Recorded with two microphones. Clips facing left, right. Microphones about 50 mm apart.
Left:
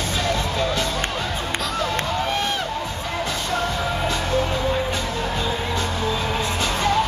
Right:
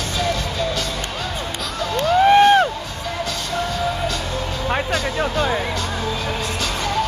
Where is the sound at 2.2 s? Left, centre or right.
Right.